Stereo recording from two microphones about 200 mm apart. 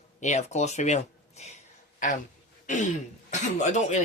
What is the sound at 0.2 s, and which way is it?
Speech, 35° left (ahead or behind).